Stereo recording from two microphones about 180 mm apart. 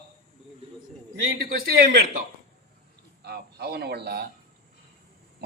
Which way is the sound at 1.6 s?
60° right (ahead or behind).